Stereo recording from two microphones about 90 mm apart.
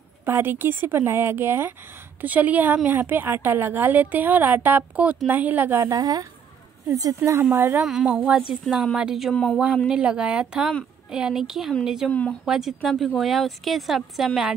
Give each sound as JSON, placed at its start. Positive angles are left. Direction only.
{"t": 0.2, "sound": "a woman's voice", "side_deg": -25}
{"t": 5.8, "sound": "a woman's voice", "side_deg": -40}
{"t": 7.2, "sound": "a woman's voice", "side_deg": -30}
{"t": 7.8, "sound": "speech", "side_deg": -5}
{"t": 9.3, "sound": "speech", "side_deg": 10}
{"t": 9.8, "sound": "speech", "side_deg": -10}
{"t": 12.1, "sound": "speech", "side_deg": 15}
{"t": 12.4, "sound": "speech", "side_deg": -5}